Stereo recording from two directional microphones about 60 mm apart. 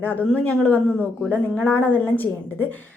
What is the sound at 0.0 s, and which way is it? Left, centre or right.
Speech, left.